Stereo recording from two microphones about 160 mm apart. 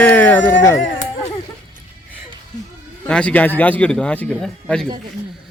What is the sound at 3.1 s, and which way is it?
Speech, 5° left (ahead or behind).